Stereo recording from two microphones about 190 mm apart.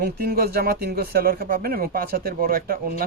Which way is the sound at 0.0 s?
55° right (ahead or behind).